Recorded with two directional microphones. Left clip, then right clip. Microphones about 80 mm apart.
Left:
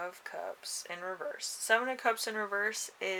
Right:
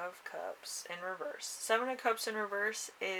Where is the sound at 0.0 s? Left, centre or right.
Left.